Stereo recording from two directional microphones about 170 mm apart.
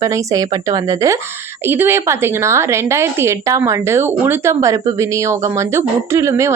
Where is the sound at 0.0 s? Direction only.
20° right (ahead or behind).